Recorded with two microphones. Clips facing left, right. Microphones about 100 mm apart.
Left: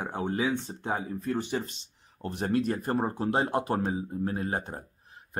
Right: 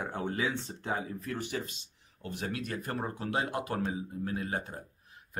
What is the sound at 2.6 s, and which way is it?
Speech, 30° left (ahead or behind).